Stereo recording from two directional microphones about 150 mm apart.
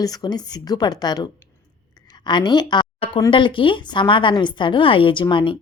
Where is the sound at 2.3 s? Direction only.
30° left (ahead or behind).